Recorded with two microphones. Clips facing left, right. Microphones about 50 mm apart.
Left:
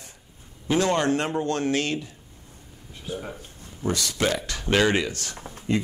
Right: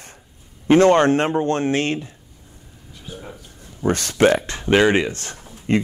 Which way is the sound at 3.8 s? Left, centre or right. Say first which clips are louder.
Right 8 dB; right.